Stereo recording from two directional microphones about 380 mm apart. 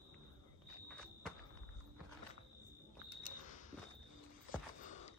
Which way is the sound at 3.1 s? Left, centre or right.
Centre.